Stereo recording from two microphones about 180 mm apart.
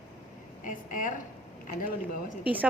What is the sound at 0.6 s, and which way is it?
Speech, 45° left (ahead or behind).